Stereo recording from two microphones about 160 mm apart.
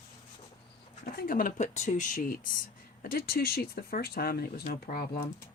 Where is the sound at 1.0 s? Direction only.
65° left (ahead or behind).